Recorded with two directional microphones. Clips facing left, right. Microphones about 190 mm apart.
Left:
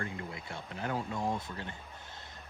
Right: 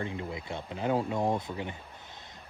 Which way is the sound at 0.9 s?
60° right (ahead or behind).